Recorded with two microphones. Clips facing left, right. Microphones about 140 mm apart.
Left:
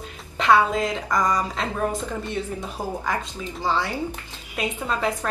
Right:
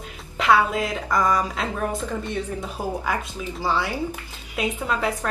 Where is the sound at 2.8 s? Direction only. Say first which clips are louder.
Right 1 dB; 10° right (ahead or behind).